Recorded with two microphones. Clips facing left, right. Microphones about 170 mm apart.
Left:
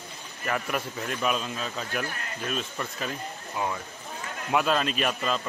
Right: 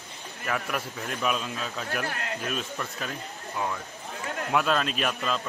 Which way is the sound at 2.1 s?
65° right (ahead or behind).